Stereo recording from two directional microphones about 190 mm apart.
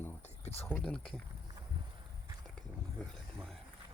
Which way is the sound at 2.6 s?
5° left (ahead or behind).